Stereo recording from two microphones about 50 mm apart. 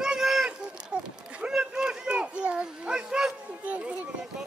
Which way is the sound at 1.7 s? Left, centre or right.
Centre.